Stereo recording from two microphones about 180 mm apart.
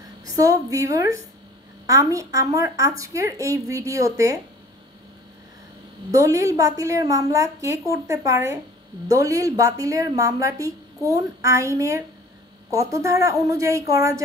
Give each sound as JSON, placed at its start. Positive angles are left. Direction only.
{"t": 0.2, "sound": "a woman's voice", "side_deg": -20}
{"t": 6.1, "sound": "a woman's voice", "side_deg": -20}